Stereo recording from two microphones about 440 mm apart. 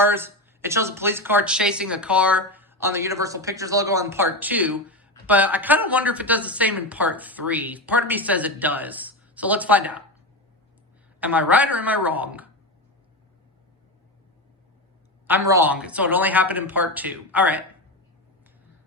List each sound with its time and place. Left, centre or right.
0.0 s speech: centre
11.2 s speech: centre
15.3 s speech: centre